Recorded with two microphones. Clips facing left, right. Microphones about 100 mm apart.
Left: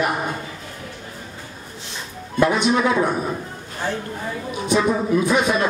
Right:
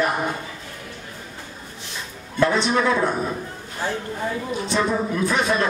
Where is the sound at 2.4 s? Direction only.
15° left (ahead or behind).